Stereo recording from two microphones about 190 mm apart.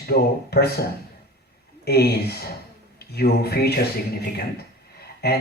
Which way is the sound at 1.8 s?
55° left (ahead or behind).